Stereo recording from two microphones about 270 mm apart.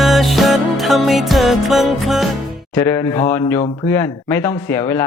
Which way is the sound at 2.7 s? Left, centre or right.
Centre.